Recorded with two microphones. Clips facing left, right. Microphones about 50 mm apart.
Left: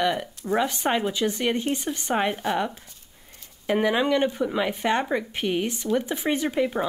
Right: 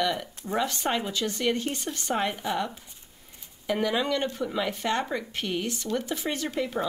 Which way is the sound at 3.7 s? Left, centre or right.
Left.